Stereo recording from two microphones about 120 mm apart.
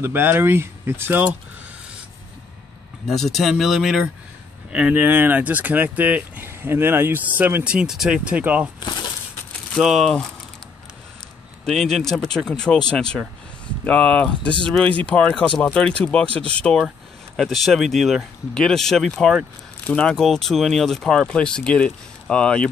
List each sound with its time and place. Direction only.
0.0 s speech: 15° right (ahead or behind)
3.1 s speech: centre (ahead or behind)
9.8 s speech: centre (ahead or behind)
11.6 s speech: centre (ahead or behind)